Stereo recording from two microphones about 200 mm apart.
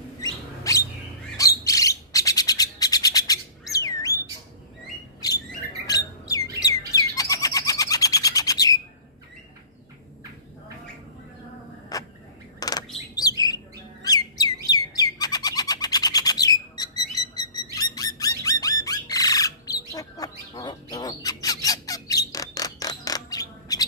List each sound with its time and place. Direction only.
0.2 s bird: 15° left (ahead or behind)
5.2 s bird: 20° left (ahead or behind)
5.9 s squawk: 20° left (ahead or behind)
6.9 s bird: 15° left (ahead or behind)
11.9 s a sound: 20° left (ahead or behind)
12.5 s bird: 20° left (ahead or behind)